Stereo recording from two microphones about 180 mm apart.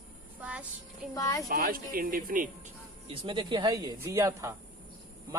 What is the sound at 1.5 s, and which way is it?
Speech, 55° right (ahead or behind).